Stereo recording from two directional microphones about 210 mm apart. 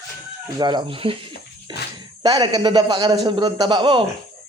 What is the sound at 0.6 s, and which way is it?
Speech, 20° right (ahead or behind).